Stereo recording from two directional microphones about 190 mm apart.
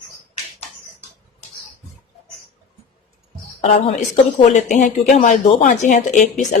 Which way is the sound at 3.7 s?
35° left (ahead or behind).